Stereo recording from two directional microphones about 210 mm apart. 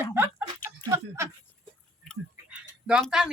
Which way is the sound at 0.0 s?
10° right (ahead or behind).